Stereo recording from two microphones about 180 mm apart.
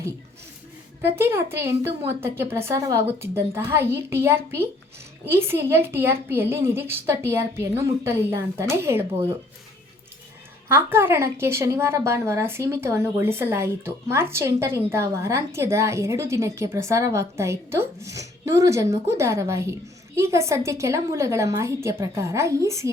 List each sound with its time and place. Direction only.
1.0 s a woman's voice: 15° right (ahead or behind)
10.7 s a woman's voice: 15° right (ahead or behind)